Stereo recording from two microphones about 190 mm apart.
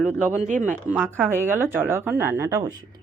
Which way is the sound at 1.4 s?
10° right (ahead or behind).